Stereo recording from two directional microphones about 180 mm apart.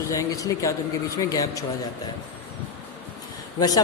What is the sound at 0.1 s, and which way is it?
Speech, 20° left (ahead or behind).